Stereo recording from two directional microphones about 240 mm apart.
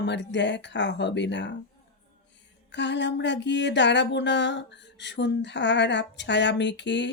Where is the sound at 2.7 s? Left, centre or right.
Left.